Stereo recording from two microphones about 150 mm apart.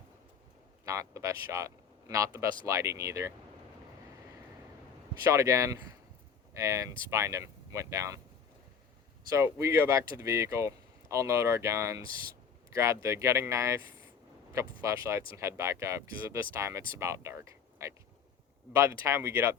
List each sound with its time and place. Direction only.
0.9 s speech: 20° right (ahead or behind)
5.3 s speech: 20° right (ahead or behind)
9.3 s speech: 20° right (ahead or behind)
18.8 s speech: 20° right (ahead or behind)